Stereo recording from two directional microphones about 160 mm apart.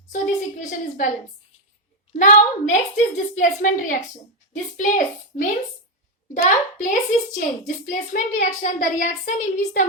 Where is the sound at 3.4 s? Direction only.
55° left (ahead or behind).